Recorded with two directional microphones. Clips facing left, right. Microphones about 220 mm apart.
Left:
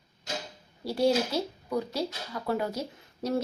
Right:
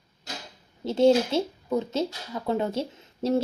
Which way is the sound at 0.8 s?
25° right (ahead or behind).